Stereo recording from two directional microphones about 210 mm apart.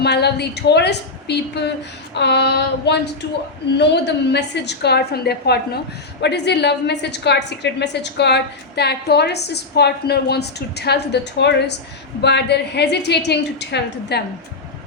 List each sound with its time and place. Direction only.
0.0 s a woman's voice: 50° left (ahead or behind)